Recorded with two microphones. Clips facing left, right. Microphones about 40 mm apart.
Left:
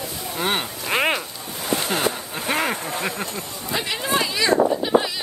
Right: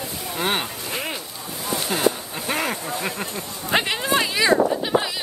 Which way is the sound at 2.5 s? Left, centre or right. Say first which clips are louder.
Left 2 dB; left.